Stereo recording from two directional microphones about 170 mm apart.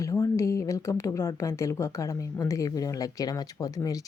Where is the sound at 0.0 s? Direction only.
20° left (ahead or behind).